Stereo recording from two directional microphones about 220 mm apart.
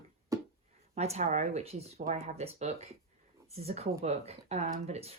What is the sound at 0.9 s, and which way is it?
Speech, 30° right (ahead or behind).